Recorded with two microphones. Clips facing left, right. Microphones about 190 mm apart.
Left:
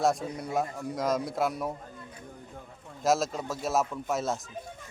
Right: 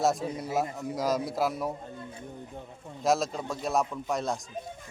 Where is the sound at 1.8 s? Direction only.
25° right (ahead or behind).